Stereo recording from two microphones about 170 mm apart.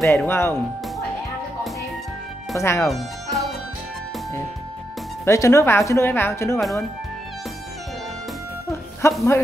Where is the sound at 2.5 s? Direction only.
15° left (ahead or behind).